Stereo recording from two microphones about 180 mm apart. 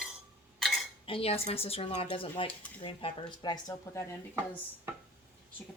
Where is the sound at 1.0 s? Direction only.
30° left (ahead or behind).